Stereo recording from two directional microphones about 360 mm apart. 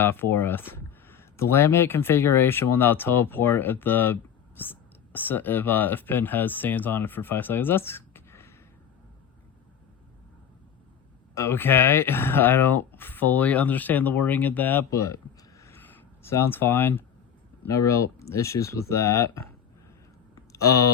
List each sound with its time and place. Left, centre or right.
0.0 s speech: centre
11.3 s speech: centre